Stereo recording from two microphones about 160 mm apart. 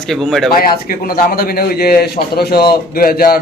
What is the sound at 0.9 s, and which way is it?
A man's voice, 65° left (ahead or behind).